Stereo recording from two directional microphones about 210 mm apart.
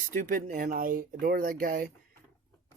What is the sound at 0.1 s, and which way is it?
Speech, 35° right (ahead or behind).